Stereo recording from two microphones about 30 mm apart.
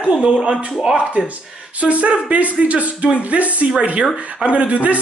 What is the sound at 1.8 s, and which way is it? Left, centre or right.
Speech, right.